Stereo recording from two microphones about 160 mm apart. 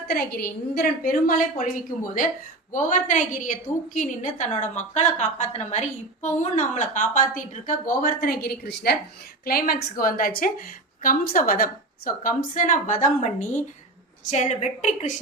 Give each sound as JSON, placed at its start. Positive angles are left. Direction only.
{"t": 0.1, "sound": "a woman's voice", "side_deg": 75}
{"t": 9.4, "sound": "a woman's voice", "side_deg": 70}